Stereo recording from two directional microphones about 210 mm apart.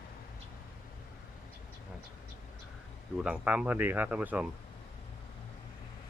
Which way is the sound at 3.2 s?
5° right (ahead or behind).